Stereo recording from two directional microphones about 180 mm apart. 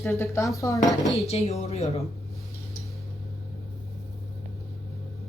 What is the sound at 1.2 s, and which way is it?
Speech, 35° left (ahead or behind).